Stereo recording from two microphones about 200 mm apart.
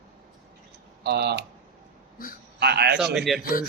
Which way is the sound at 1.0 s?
55° right (ahead or behind).